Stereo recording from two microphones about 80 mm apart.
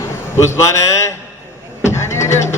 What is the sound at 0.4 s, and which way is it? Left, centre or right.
Speech, left.